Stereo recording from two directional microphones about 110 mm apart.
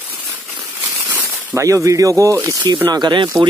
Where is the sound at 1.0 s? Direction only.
20° right (ahead or behind).